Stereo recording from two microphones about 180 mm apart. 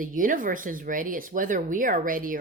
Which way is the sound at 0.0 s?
50° right (ahead or behind).